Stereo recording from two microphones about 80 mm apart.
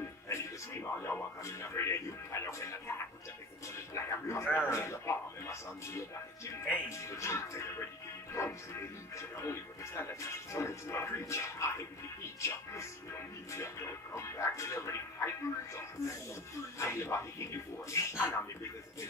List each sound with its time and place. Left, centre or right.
0.3 s television: left
1.4 s television: left
3.6 s a sound: left
4.6 s music: left
16.7 s television: left
18.2 s a sound: left